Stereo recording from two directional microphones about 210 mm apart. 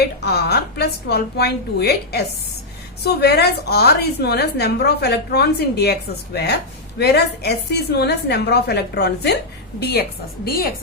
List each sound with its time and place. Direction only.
0.0 s a woman's voice: 50° left (ahead or behind)